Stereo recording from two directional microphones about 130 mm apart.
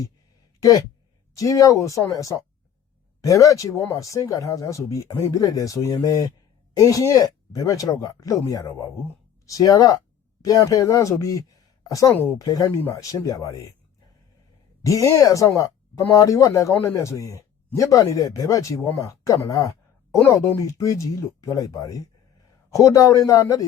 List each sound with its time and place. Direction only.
0.6 s a woman's voice: 25° left (ahead or behind)
12.1 s speech: 15° left (ahead or behind)
12.4 s speech: 30° left (ahead or behind)
14.8 s speech: 25° left (ahead or behind)